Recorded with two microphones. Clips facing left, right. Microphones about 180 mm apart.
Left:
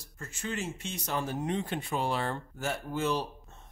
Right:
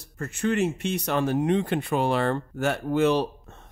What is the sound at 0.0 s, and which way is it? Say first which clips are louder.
Speech: right 12 dB; 65° right (ahead or behind).